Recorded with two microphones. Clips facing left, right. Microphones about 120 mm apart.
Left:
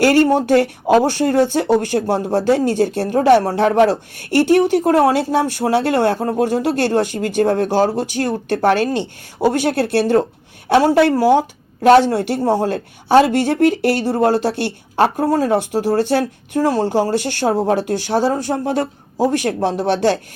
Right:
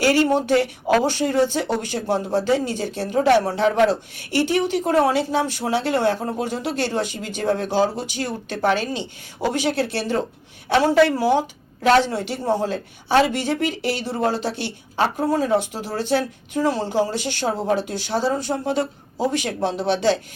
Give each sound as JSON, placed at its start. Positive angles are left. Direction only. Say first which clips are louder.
{"t": 0.0, "sound": "a man's voice", "louder": "left 5 dB", "side_deg": 55}
{"t": 11.1, "sound": "a man's voice", "louder": "left 6 dB", "side_deg": 45}
{"t": 14.2, "sound": "a man's voice", "louder": "left 7 dB", "side_deg": 60}
{"t": 15.4, "sound": "a man's voice", "louder": "left 5 dB", "side_deg": 55}
{"t": 16.9, "sound": "a man's voice", "louder": "left 5 dB", "side_deg": 60}